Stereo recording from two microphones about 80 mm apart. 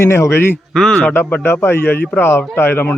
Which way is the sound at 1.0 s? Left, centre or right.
Left.